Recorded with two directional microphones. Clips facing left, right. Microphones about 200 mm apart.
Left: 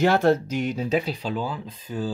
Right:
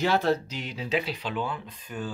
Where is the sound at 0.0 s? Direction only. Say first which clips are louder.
Left 5 dB; 50° left (ahead or behind).